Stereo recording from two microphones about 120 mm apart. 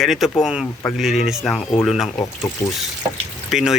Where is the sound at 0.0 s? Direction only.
Centre (ahead or behind).